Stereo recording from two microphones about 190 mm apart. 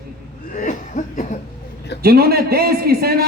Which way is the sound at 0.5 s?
45° left (ahead or behind).